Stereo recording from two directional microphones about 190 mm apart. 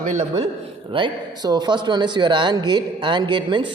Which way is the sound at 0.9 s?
25° right (ahead or behind).